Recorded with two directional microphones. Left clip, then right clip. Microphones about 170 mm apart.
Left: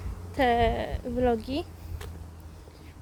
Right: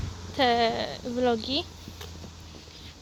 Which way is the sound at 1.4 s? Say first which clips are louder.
Right 4 dB; 55° left (ahead or behind).